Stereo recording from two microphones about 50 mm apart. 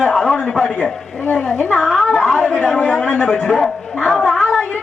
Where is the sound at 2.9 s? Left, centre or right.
Left.